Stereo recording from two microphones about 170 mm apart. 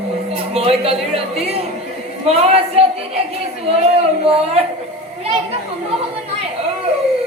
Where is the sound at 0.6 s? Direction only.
35° right (ahead or behind).